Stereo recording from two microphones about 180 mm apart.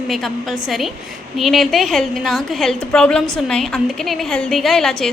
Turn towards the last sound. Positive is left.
turn(degrees=0)  # may be behind; listen again after turning